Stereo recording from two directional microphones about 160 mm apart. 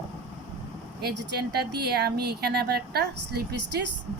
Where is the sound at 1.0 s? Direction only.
90° right.